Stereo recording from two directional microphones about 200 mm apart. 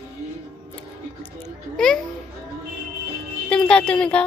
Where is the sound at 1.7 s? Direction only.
5° left (ahead or behind).